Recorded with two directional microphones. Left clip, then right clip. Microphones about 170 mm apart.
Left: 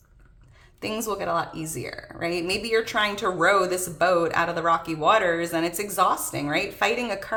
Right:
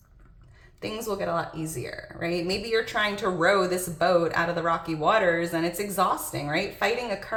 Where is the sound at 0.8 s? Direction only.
30° left (ahead or behind).